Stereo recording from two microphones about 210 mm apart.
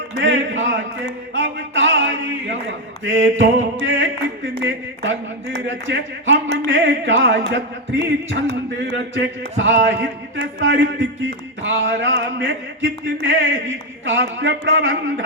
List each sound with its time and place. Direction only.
0.2 s music: 60° right (ahead or behind)